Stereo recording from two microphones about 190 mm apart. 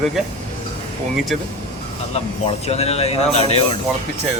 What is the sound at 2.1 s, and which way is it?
Speech, 35° left (ahead or behind).